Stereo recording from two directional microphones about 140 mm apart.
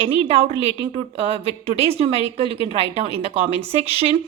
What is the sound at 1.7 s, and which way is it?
A woman's voice, 45° right (ahead or behind).